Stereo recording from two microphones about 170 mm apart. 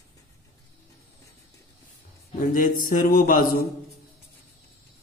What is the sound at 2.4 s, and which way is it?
A man's voice, 50° left (ahead or behind).